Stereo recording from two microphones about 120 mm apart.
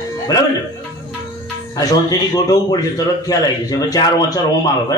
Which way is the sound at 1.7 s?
30° left (ahead or behind).